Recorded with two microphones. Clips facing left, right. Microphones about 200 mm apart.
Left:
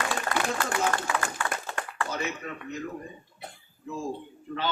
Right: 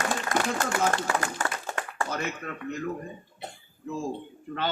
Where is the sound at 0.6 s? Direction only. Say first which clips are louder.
Right 2 dB; 50° right (ahead or behind).